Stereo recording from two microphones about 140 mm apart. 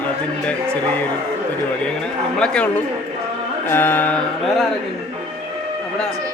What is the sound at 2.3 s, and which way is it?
Speech, 5° left (ahead or behind).